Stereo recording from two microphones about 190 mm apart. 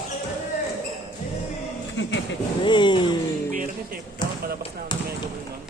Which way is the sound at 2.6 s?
25° left (ahead or behind).